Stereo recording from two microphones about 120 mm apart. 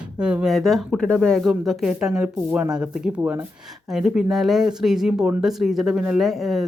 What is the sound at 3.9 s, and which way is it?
Speech, 5° right (ahead or behind).